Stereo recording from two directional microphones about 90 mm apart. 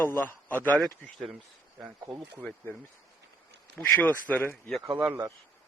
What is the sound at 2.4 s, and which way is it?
Speech, 15° left (ahead or behind).